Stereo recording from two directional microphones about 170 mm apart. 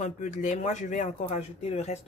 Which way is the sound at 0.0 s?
45° left (ahead or behind).